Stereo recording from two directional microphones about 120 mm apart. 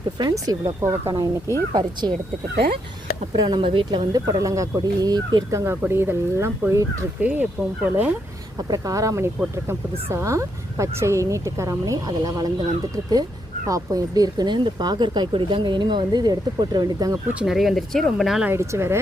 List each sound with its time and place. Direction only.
0.2 s speech: 30° right (ahead or behind)
1.7 s speech: 35° right (ahead or behind)
3.3 s speech: 35° right (ahead or behind)
7.2 s speech: 10° right (ahead or behind)
8.7 s speech: 30° right (ahead or behind)
13.7 s speech: 30° right (ahead or behind)
17.4 s speech: 5° right (ahead or behind)
18.4 s speech: 25° right (ahead or behind)